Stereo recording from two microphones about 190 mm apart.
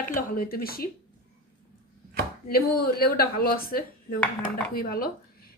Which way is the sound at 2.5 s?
55° left (ahead or behind).